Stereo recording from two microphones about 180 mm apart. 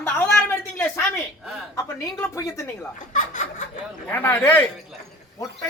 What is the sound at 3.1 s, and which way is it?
Snicker, 45° left (ahead or behind).